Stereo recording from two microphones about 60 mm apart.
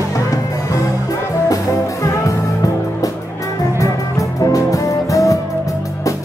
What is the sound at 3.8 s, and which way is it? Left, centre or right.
Music, left.